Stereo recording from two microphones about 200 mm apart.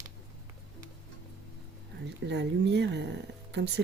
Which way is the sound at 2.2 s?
60° right (ahead or behind).